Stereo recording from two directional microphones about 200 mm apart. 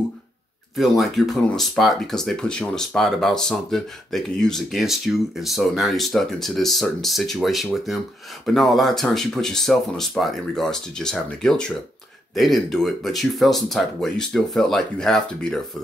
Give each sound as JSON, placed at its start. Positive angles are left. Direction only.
{"t": 0.7, "sound": "speech", "side_deg": 0}